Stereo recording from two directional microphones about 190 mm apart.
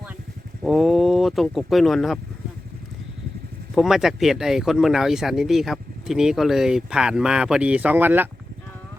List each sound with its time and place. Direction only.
0.6 s speech: centre (ahead or behind)
3.8 s speech: centre (ahead or behind)